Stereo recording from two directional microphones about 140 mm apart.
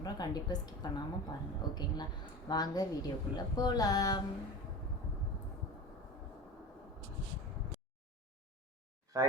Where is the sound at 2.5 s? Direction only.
30° left (ahead or behind).